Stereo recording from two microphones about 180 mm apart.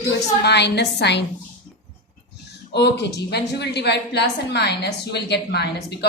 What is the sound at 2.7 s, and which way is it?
A woman's voice, 70° left (ahead or behind).